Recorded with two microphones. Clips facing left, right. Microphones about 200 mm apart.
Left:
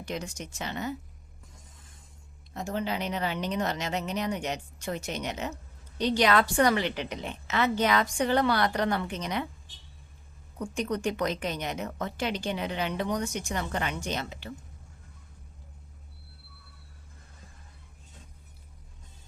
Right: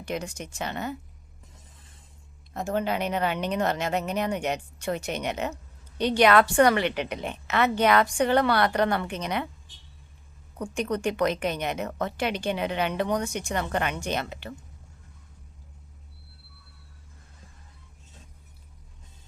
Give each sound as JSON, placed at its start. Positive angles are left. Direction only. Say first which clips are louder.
{"t": 0.0, "sound": "a woman's voice", "louder": "right 3 dB", "side_deg": -60}
{"t": 2.5, "sound": "a woman's voice", "louder": "right 4 dB", "side_deg": -55}
{"t": 10.8, "sound": "a woman's voice", "louder": "right 4 dB", "side_deg": -65}